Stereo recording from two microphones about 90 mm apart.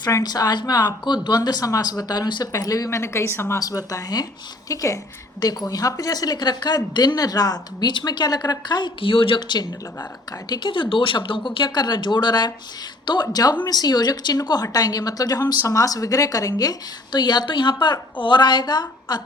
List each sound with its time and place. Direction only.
0.0 s a woman's voice: 45° left (ahead or behind); by 3.6 s 25° left (ahead or behind)
3.6 s a woman's voice: 40° left (ahead or behind)
9.0 s a woman's voice: 75° left (ahead or behind); by 19.2 s 50° left (ahead or behind)